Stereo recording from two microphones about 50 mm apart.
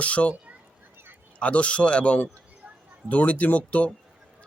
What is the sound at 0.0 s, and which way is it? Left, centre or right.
Speech, left.